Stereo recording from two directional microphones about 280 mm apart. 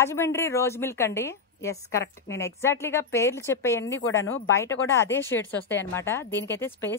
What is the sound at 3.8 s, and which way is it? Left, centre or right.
Speech, left.